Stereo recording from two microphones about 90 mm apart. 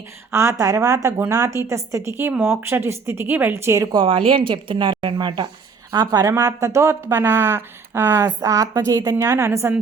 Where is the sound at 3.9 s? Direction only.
90° right; by 5.5 s 60° right (ahead or behind).